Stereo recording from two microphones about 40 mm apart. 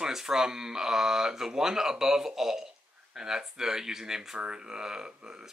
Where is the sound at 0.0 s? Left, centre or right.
Centre.